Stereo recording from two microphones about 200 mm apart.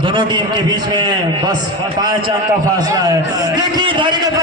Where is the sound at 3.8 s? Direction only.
25° right (ahead or behind).